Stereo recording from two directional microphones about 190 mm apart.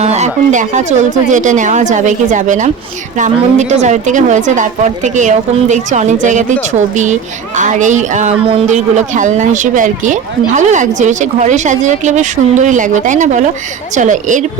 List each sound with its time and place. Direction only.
0.0 s speech: 35° right (ahead or behind)